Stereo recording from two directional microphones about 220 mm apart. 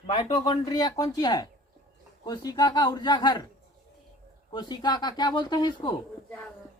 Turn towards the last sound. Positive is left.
turn(degrees=20)  # may be behind; listen again after turning